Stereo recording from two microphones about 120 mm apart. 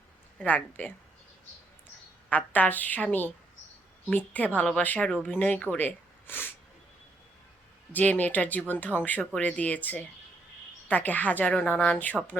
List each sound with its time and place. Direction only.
0.3 s speech: 10° left (ahead or behind)
2.3 s speech: 15° left (ahead or behind)
5.1 s speech: centre (ahead or behind)
5.4 s speech: 10° left (ahead or behind)
7.9 s speech: 15° left (ahead or behind)